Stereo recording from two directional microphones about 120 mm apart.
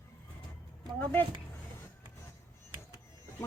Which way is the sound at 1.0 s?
15° left (ahead or behind).